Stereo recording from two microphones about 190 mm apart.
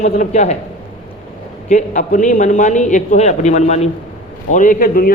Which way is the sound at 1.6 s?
40° left (ahead or behind).